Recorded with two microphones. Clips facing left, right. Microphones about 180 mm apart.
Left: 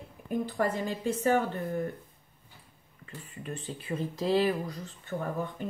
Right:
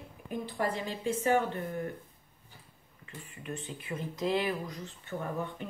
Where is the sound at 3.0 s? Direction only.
35° left (ahead or behind).